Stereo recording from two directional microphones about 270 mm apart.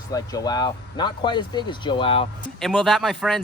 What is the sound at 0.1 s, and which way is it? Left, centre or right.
Speech, centre.